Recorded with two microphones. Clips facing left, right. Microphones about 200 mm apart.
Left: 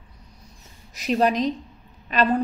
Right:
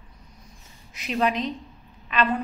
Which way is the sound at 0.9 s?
40° left (ahead or behind).